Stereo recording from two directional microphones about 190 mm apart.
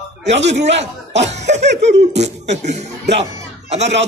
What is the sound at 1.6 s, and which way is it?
Speech, 65° right (ahead or behind).